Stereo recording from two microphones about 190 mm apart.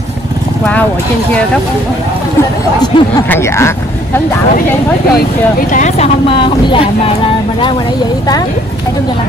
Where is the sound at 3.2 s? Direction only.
15° left (ahead or behind).